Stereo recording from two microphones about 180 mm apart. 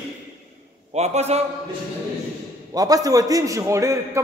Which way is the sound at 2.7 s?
20° right (ahead or behind).